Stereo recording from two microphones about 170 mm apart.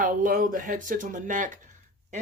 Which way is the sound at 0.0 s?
50° right (ahead or behind).